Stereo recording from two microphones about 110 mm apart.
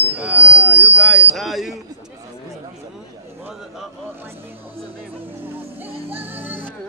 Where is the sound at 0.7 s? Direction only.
15° right (ahead or behind).